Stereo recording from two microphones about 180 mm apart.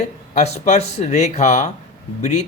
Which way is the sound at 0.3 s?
40° left (ahead or behind).